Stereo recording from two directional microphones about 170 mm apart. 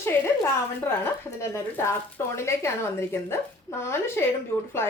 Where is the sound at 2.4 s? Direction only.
15° left (ahead or behind).